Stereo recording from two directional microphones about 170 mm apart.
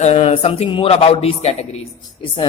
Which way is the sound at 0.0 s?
40° left (ahead or behind).